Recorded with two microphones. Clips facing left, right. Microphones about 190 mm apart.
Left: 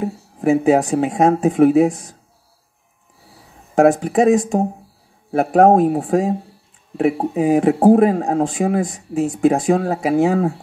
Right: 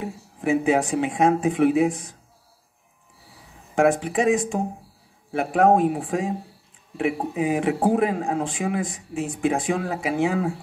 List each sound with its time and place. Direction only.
0.0 s a man's voice: 40° left (ahead or behind)
3.7 s a man's voice: 40° left (ahead or behind)